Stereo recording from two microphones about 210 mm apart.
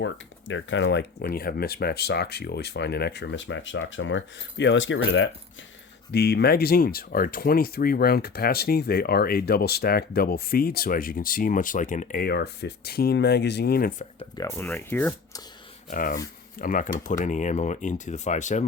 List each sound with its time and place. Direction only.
0.0 s speech: 60° left (ahead or behind)
6.1 s speech: 50° left (ahead or behind)
14.3 s speech: 10° left (ahead or behind)
15.9 s speech: 40° left (ahead or behind)